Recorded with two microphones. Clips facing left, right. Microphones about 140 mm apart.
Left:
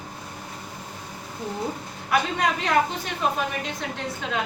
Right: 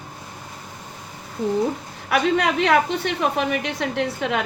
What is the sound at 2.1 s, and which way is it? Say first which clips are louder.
A woman's voice: right 4 dB; 70° right (ahead or behind).